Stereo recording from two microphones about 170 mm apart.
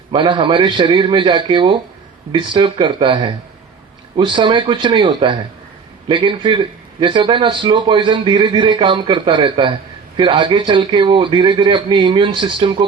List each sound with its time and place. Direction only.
0.1 s speech: 30° right (ahead or behind)